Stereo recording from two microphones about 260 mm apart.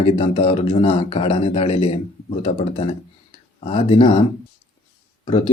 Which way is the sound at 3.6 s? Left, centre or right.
Left.